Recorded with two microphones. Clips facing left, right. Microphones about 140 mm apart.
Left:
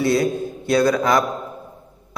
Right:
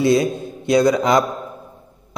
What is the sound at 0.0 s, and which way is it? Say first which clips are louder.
A man's voice: right 2 dB; 20° right (ahead or behind).